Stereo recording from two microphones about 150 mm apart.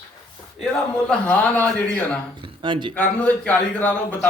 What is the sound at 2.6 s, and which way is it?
Speech, 35° right (ahead or behind).